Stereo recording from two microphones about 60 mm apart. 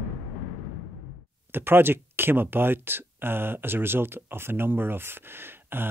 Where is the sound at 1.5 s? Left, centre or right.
Right.